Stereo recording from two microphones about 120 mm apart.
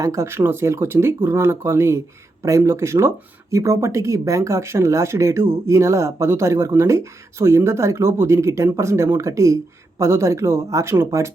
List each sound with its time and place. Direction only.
0.0 s speech: 25° right (ahead or behind)